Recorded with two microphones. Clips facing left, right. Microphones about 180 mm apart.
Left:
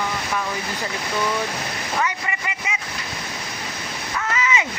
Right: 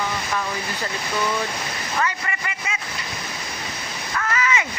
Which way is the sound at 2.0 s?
15° left (ahead or behind).